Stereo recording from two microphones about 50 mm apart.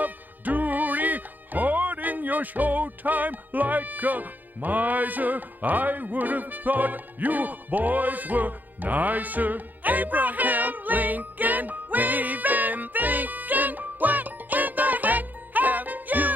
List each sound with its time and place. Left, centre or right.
0.0 s music: right